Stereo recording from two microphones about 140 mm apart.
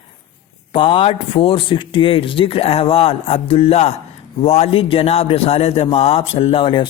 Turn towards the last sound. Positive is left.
turn(degrees=40)  # may be behind; listen again after turning